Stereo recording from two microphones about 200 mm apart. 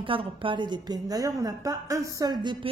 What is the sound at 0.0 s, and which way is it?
A woman's voice, 25° right (ahead or behind).